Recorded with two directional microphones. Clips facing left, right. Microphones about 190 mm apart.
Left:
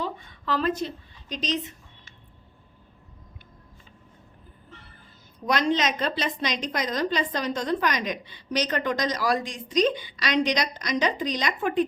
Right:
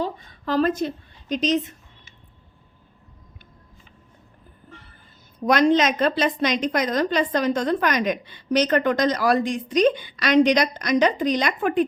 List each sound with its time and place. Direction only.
0.0 s a woman's voice: 40° right (ahead or behind)
5.5 s a woman's voice: 50° right (ahead or behind)